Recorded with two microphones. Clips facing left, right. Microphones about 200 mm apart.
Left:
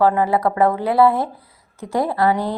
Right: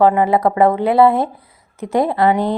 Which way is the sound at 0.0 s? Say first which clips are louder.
Right 3 dB; 20° right (ahead or behind).